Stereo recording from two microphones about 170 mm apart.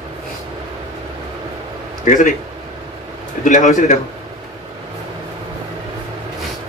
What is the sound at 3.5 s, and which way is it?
Speech, 50° left (ahead or behind).